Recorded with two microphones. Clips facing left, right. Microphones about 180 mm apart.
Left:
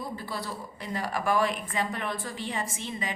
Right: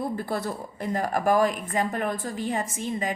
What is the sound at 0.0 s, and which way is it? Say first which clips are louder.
A woman's voice: right 7 dB; 50° right (ahead or behind).